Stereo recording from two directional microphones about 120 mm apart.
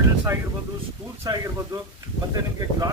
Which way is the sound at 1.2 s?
30° right (ahead or behind).